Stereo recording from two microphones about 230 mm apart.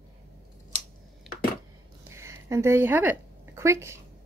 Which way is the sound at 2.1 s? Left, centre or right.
Centre.